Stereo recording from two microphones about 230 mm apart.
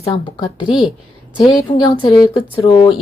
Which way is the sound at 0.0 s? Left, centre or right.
Left.